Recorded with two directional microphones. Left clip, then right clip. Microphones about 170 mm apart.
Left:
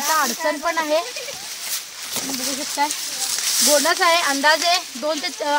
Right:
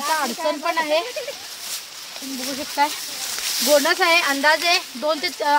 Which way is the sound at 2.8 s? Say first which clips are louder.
Right 2 dB; 5° right (ahead or behind).